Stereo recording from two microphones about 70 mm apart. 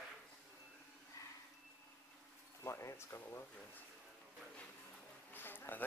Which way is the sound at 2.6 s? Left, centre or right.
Left.